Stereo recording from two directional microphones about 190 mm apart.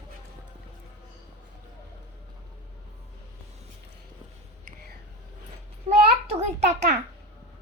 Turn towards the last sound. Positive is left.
turn(degrees=-35)  # may be behind; listen again after turning